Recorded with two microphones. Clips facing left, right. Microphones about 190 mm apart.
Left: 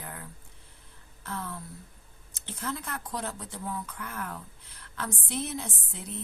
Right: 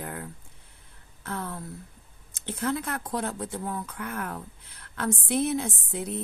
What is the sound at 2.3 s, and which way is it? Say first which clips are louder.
A woman's voice: right 7 dB; 55° right (ahead or behind).